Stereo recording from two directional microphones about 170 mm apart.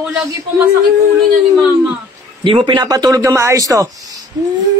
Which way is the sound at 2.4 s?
30° right (ahead or behind).